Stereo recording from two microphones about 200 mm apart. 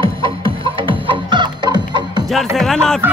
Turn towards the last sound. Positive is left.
turn(degrees=0)  # may be behind; listen again after turning